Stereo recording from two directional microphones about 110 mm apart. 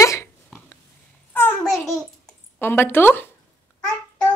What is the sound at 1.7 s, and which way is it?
Speech, centre (ahead or behind).